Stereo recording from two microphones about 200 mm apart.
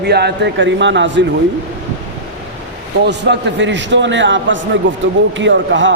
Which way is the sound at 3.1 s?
60° right (ahead or behind).